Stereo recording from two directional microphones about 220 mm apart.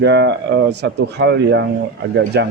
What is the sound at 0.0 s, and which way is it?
Speech, 50° right (ahead or behind).